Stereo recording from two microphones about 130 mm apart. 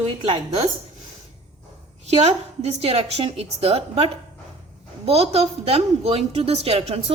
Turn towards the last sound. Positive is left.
turn(degrees=-50)  # may be behind; listen again after turning